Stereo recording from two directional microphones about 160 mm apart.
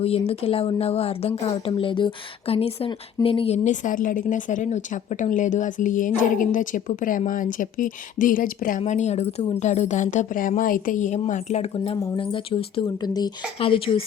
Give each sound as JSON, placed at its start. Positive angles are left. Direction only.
{"t": 0.0, "sound": "a woman's voice", "side_deg": 40}
{"t": 8.8, "sound": "speech", "side_deg": 45}
{"t": 11.9, "sound": "speech", "side_deg": 30}